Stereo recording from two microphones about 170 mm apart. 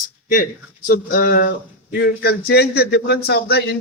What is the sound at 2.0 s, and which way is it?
Speech, 75° left (ahead or behind).